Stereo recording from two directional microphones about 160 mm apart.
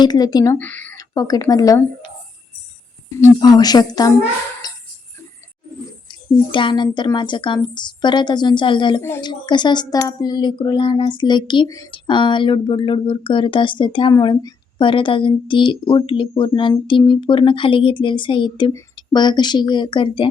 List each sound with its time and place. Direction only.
0.0 s a woman's voice: 25° left (ahead or behind)
0.6 s speech: 10° left (ahead or behind)
0.9 s speech: 20° left (ahead or behind)
3.2 s a woman's voice: 25° left (ahead or behind)
4.6 s music: 25° left (ahead or behind)
6.1 s a woman's voice: 30° left (ahead or behind)
9.0 s speech: 15° left (ahead or behind)
9.2 s a woman's voice: 30° left (ahead or behind)